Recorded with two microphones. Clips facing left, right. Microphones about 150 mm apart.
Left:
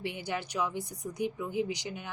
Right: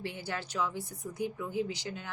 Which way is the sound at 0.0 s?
15° left (ahead or behind).